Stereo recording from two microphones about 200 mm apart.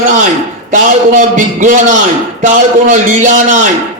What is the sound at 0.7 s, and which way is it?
A man's voice, 40° right (ahead or behind).